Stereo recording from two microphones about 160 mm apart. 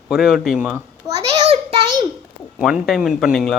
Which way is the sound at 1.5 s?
35° right (ahead or behind).